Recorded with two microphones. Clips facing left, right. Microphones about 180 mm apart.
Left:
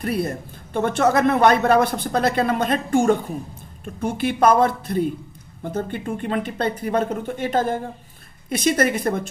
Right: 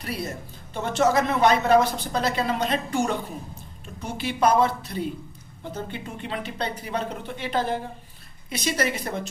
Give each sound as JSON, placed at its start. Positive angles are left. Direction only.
{"t": 0.0, "sound": "speech", "side_deg": 55}